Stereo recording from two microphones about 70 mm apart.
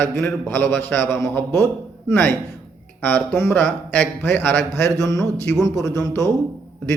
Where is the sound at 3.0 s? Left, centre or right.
Centre.